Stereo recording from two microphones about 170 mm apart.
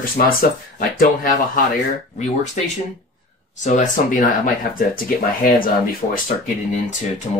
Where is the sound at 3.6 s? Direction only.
45° left (ahead or behind).